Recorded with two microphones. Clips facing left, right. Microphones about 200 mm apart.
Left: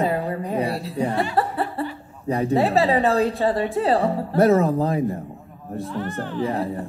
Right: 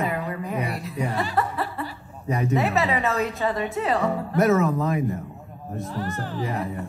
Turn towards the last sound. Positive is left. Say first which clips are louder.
# left 4 dB
turn(degrees=30)  # may be behind; listen again after turning